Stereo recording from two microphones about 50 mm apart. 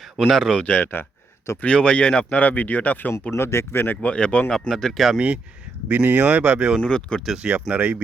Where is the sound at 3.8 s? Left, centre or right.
Left.